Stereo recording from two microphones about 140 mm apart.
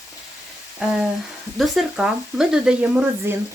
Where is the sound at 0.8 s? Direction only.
5° right (ahead or behind).